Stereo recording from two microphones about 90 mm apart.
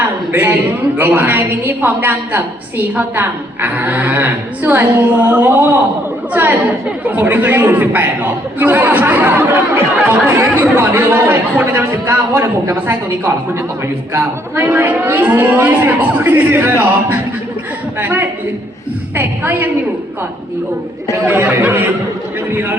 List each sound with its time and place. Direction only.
0.3 s a man's voice: 20° right (ahead or behind)
21.2 s a man's voice: 20° right (ahead or behind)